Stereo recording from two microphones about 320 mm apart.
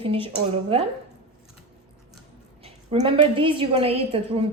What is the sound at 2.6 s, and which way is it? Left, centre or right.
A woman's voice, centre.